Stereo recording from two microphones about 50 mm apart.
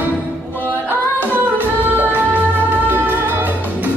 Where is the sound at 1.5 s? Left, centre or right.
Right.